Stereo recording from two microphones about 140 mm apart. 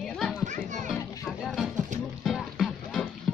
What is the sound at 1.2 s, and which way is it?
Music, centre (ahead or behind).